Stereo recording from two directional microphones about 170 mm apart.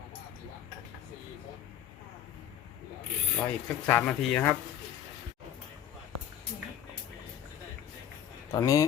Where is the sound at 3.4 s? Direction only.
10° left (ahead or behind).